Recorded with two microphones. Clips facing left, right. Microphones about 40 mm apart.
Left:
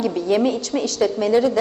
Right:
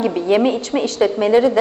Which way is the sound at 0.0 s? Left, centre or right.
Right.